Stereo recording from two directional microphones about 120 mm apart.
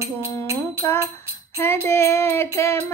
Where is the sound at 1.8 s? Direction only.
25° left (ahead or behind).